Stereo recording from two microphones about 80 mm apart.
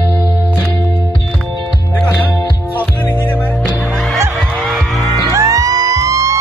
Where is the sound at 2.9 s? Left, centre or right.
Left.